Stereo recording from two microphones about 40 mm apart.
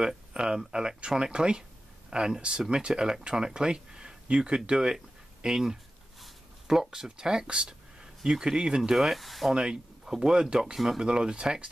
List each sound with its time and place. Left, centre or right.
0.0 s speech: centre
4.9 s a sound: centre
6.2 s speech: centre
8.9 s speech: centre
9.5 s speech: centre